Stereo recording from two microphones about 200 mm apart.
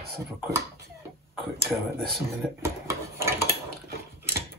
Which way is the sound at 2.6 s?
15° right (ahead or behind).